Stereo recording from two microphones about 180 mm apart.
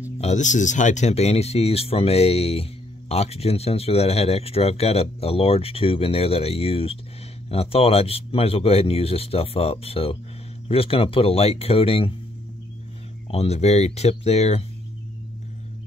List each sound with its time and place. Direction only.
0.2 s speech: 40° left (ahead or behind)
13.3 s speech: 35° left (ahead or behind)